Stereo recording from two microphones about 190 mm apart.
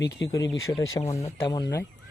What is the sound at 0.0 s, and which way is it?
Speech, 70° left (ahead or behind).